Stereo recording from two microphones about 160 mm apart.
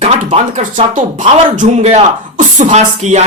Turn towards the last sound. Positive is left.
turn(degrees=-45)  # may be behind; listen again after turning